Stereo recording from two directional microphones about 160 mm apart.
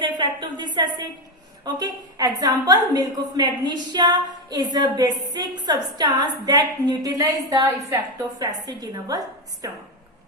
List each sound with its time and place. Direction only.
0.0 s a woman's voice: 30° right (ahead or behind)